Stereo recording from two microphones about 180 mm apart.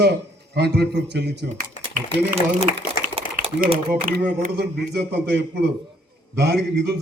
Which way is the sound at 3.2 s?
35° right (ahead or behind).